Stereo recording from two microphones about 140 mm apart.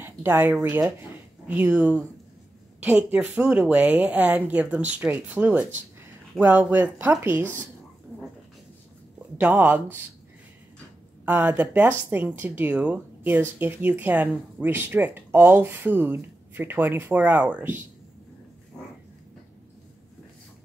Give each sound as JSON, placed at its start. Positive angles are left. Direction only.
{"t": 0.0, "sound": "speech", "side_deg": -15}
{"t": 9.4, "sound": "speech", "side_deg": -15}
{"t": 11.2, "sound": "speech", "side_deg": -10}